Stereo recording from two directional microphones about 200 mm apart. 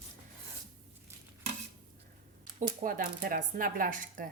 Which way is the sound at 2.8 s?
45° right (ahead or behind).